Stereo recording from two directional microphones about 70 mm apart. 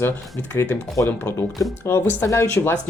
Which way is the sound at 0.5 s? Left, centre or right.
Left.